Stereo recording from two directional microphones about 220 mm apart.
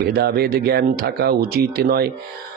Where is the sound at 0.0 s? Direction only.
45° right (ahead or behind).